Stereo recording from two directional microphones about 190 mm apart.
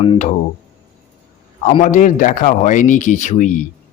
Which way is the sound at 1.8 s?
40° left (ahead or behind).